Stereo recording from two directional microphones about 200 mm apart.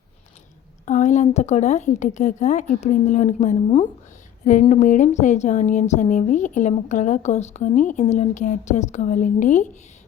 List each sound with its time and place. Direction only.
0.9 s speech: 40° left (ahead or behind)